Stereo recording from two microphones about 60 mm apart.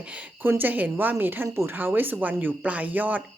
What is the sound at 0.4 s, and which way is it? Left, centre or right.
A woman's voice, right.